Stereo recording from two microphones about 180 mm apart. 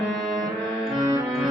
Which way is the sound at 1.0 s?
20° right (ahead or behind).